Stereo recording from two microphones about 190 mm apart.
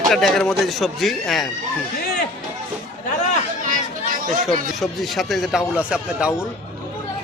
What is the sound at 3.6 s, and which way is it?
Chatter, 45° right (ahead or behind).